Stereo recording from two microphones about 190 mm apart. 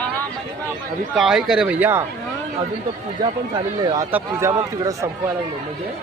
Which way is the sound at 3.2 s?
25° right (ahead or behind).